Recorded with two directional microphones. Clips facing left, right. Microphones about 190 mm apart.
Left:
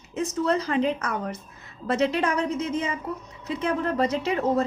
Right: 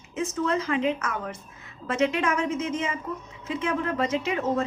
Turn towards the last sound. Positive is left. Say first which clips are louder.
# left 2 dB
turn(degrees=35)  # may be behind; listen again after turning